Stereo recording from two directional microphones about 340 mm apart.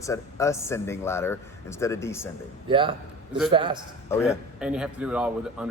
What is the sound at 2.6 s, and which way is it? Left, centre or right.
Speech, centre.